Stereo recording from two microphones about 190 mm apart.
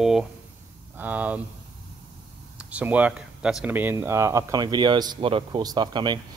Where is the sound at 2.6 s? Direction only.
5° right (ahead or behind).